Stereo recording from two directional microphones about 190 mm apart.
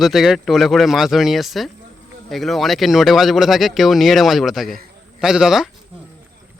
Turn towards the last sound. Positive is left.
turn(degrees=-5)  # may be behind; listen again after turning